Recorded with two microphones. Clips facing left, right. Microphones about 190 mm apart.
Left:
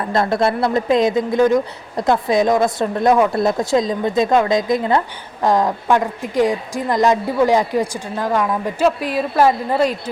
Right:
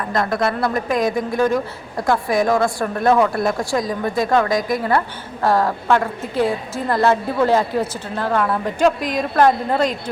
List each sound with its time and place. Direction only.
0.1 s speech: 25° left (ahead or behind); by 9.9 s 5° left (ahead or behind)